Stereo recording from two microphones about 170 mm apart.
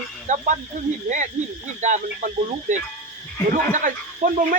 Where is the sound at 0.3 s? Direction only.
45° right (ahead or behind).